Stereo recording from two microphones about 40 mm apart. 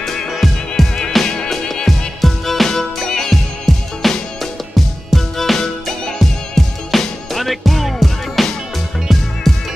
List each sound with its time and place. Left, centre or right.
0.3 s music: centre
1.2 s music: centre
1.9 s music: centre